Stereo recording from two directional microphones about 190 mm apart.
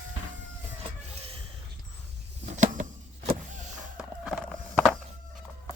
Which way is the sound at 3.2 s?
40° right (ahead or behind).